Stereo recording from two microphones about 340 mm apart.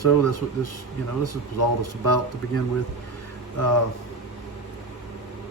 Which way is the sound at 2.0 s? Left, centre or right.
Left.